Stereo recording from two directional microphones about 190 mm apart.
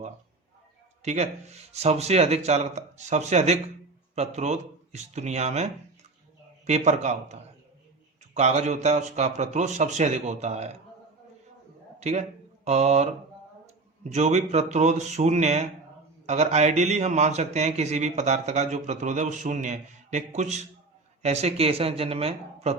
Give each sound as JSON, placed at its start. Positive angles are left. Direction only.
{"t": 1.0, "sound": "a man's voice", "side_deg": -35}
{"t": 11.9, "sound": "a man's voice", "side_deg": -35}
{"t": 14.1, "sound": "a man's voice", "side_deg": -35}